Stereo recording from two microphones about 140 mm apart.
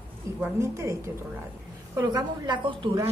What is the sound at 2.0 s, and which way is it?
Speech, 30° right (ahead or behind).